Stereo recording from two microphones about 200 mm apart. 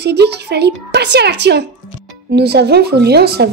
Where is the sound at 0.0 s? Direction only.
55° right (ahead or behind).